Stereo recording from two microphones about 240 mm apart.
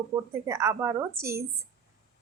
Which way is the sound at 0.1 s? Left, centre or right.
Centre.